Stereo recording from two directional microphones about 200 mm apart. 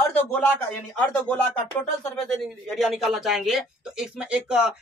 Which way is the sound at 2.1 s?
5° left (ahead or behind).